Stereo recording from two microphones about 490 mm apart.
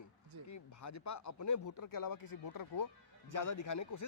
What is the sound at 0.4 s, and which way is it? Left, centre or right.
Speech, left.